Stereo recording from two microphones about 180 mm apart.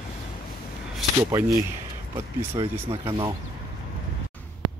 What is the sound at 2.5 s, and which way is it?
Speech, 30° right (ahead or behind).